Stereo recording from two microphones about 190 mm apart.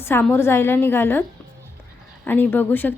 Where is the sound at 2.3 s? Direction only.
10° left (ahead or behind).